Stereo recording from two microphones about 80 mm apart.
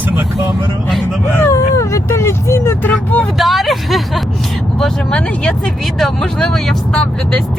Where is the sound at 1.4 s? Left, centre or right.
Left.